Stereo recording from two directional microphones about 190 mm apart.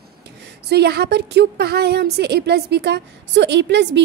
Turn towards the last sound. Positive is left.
turn(degrees=-65)  # may be behind; listen again after turning